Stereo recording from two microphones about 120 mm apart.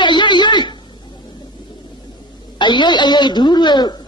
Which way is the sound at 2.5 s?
40° left (ahead or behind).